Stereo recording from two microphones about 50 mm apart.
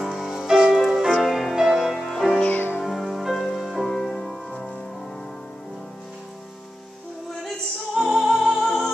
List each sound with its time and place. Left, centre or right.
0.0 s music: centre
2.4 s music: left
2.8 s music: centre
3.8 s music: centre
7.9 s music: centre